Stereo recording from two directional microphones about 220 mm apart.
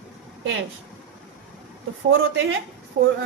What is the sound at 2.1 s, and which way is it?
Speech, 60° right (ahead or behind).